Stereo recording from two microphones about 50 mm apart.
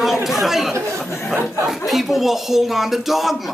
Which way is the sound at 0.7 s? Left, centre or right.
Right.